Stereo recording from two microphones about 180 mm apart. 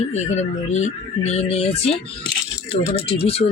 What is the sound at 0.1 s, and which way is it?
Speech, 40° left (ahead or behind).